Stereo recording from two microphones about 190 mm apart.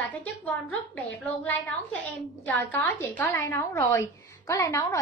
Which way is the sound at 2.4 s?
10° left (ahead or behind).